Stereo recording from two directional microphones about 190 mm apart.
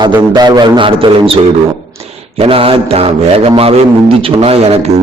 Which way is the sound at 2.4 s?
30° right (ahead or behind).